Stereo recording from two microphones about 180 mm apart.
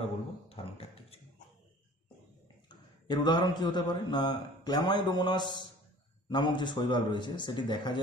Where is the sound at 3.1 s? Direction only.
25° left (ahead or behind).